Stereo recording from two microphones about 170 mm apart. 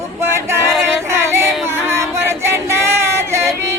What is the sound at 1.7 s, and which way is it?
Female singing, 15° right (ahead or behind).